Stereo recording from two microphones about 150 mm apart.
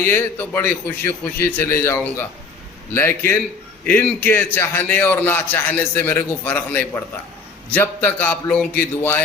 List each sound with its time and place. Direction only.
0.0 s a man's voice: 15° left (ahead or behind)